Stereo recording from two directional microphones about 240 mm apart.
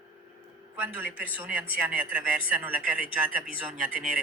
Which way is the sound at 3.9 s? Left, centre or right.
Right.